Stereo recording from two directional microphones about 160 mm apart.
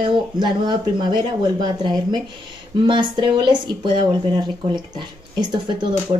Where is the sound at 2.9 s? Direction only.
30° right (ahead or behind).